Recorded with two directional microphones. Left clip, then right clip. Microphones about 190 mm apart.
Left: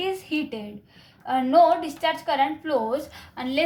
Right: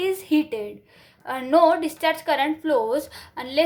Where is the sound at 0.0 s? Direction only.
40° right (ahead or behind).